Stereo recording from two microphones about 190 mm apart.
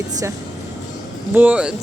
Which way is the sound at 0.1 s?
20° right (ahead or behind).